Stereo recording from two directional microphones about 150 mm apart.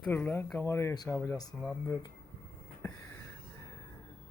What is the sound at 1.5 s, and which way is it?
Speech, 5° left (ahead or behind).